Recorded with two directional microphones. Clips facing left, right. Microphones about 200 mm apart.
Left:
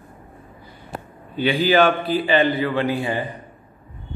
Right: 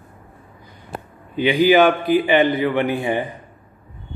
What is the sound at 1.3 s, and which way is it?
A man's voice, 15° right (ahead or behind).